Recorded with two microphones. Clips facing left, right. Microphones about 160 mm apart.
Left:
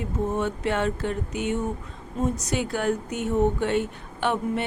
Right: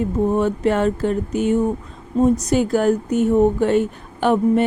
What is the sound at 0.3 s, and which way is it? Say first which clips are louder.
Speech: right 6 dB; 40° right (ahead or behind).